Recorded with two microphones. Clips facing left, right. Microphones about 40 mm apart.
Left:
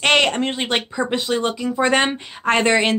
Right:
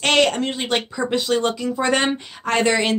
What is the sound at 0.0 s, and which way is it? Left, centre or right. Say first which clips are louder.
Speech: left 1 dB; left.